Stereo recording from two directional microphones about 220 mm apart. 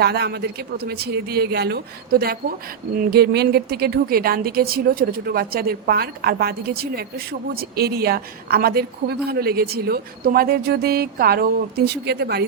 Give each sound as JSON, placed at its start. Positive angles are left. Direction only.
{"t": 0.0, "sound": "a woman's voice", "side_deg": -45}